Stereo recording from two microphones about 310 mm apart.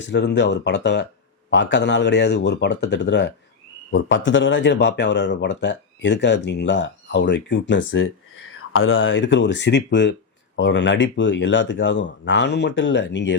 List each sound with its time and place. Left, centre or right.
0.1 s speech: left